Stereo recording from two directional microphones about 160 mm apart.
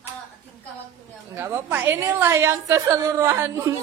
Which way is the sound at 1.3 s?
15° right (ahead or behind).